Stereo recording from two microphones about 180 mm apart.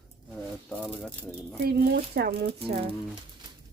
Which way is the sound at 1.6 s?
60° right (ahead or behind).